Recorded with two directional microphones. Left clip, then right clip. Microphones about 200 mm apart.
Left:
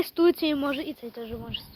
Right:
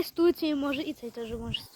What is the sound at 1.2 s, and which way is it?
Speech, 25° right (ahead or behind).